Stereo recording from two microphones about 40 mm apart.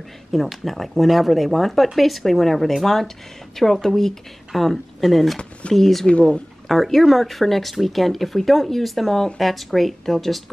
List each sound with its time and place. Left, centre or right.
0.3 s speech: centre
6.0 s speech: left
6.7 s speech: centre